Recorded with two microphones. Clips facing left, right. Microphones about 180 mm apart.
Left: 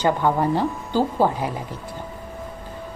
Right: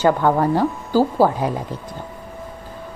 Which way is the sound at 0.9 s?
10° right (ahead or behind).